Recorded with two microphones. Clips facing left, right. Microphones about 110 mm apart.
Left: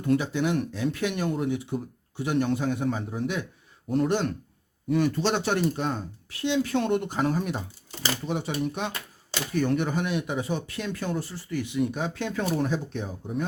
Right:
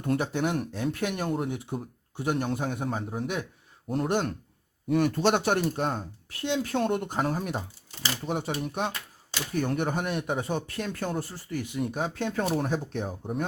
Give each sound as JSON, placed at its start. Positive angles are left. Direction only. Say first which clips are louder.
{"t": 0.0, "sound": "speech", "louder": "left 2 dB", "side_deg": -50}